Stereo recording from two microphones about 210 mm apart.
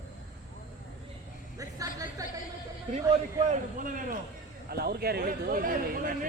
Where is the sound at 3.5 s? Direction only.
40° right (ahead or behind).